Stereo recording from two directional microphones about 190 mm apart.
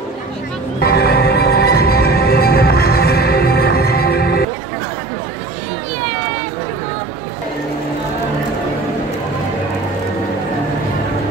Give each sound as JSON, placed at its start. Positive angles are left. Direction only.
{"t": 0.7, "sound": "music", "side_deg": 55}